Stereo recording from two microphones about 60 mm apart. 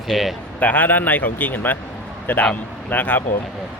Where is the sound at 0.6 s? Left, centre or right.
Left.